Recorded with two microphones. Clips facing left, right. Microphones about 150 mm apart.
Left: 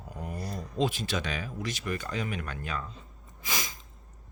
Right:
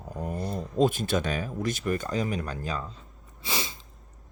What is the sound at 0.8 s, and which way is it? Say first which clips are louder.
Speech: right 5 dB; 50° right (ahead or behind).